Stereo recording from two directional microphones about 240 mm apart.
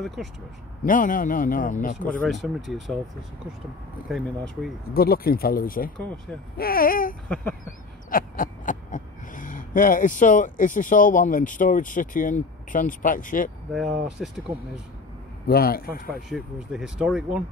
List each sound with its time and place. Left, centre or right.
0.0 s speech: centre
0.8 s speech: left
2.2 s speech: centre
4.8 s speech: left
7.6 s owl: left
13.7 s speech: centre
15.4 s speech: left
16.3 s speech: centre